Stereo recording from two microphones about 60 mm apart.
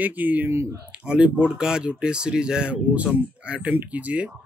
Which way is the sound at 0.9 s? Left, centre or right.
Centre.